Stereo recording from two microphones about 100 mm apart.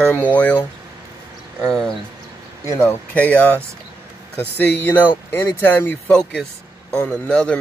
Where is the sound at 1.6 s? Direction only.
5° left (ahead or behind).